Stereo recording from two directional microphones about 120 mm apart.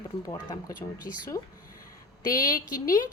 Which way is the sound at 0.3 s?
35° left (ahead or behind).